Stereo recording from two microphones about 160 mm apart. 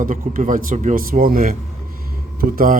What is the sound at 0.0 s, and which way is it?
Speech, 60° right (ahead or behind).